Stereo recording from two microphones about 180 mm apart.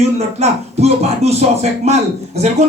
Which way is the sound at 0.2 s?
35° right (ahead or behind).